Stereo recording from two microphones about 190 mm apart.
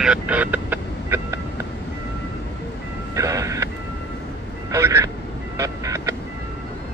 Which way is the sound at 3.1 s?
15° right (ahead or behind).